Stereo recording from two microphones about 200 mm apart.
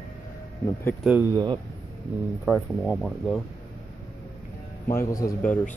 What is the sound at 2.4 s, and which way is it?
Speech, centre (ahead or behind).